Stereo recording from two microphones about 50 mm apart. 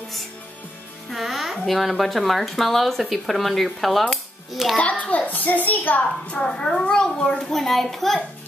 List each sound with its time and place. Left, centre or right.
1.1 s music: centre
1.7 s speech: centre
4.7 s a child's voice: left
6.4 s a child's voice: centre